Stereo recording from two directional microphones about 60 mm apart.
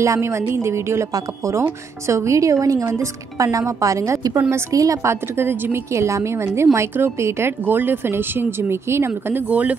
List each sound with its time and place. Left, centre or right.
0.0 s a woman's voice: right
1.1 s speech: right
2.9 s speech: right
4.7 s a woman's voice: right
5.4 s a woman's voice: right
7.6 s a woman's voice: right
9.3 s speech: right